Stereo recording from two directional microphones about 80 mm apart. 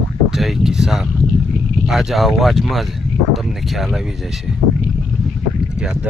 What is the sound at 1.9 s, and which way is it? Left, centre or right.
Speech, centre.